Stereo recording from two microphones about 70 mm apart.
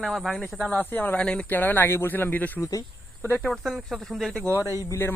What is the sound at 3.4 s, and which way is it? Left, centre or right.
Speech, centre.